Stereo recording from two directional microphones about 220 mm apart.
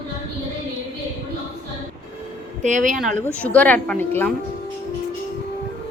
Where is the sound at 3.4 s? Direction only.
5° left (ahead or behind).